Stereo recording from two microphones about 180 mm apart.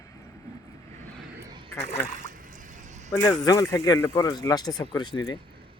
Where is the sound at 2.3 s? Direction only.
45° right (ahead or behind).